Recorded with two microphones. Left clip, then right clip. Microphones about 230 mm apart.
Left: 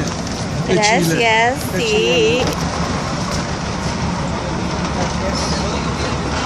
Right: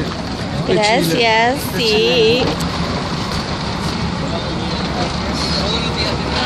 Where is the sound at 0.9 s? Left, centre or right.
Right.